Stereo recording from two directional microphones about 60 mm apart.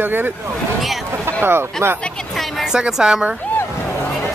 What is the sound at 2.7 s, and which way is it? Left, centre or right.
Speech, centre.